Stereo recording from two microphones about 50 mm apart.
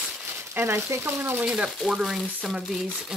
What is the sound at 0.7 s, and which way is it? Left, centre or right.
Speech, right.